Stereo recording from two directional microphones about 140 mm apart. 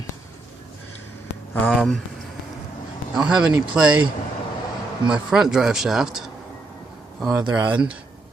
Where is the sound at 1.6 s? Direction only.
5° left (ahead or behind).